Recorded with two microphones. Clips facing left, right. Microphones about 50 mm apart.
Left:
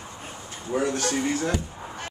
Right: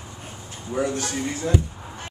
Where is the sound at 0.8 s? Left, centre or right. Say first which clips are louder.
Even; left.